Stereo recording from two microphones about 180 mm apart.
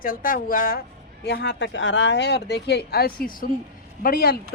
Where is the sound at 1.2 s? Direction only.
70° left (ahead or behind).